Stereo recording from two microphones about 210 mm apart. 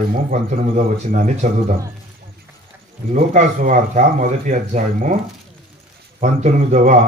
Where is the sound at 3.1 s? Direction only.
35° right (ahead or behind).